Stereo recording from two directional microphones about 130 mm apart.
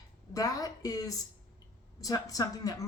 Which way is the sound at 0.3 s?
30° left (ahead or behind).